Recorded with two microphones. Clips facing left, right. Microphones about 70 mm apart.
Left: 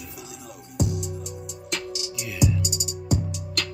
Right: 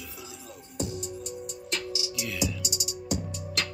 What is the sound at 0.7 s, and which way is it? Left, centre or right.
Music, left.